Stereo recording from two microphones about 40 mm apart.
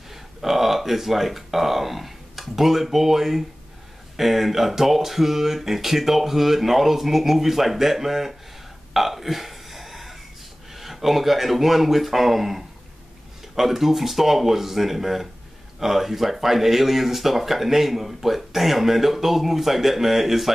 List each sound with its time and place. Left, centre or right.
0.1 s speech: centre
8.9 s burping: centre
10.7 s speech: centre